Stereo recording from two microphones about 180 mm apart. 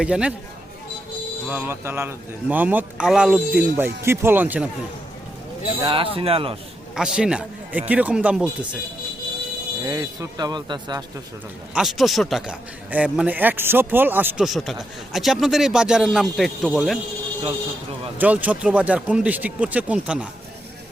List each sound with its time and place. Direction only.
0.0 s a man's voice: 5° right (ahead or behind)
1.5 s speech: 10° right (ahead or behind)
5.8 s a man's voice: 30° right (ahead or behind)
6.9 s a man's voice: 5° right (ahead or behind)
9.8 s speech: 20° right (ahead or behind)
11.7 s a man's voice: centre (ahead or behind)
18.2 s speech: 10° right (ahead or behind)